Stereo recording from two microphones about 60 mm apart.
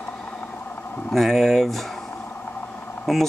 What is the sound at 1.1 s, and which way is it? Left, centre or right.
Speech, centre.